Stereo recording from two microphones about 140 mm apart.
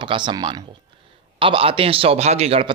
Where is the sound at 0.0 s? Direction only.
35° right (ahead or behind).